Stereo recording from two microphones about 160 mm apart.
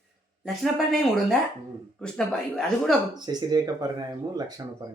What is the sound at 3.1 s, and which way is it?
Speech, 25° right (ahead or behind).